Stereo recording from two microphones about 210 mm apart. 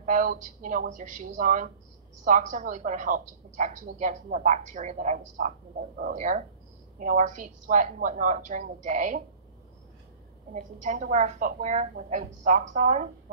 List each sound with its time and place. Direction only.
0.0 s a woman's voice: 40° right (ahead or behind)
10.5 s a woman's voice: 35° right (ahead or behind)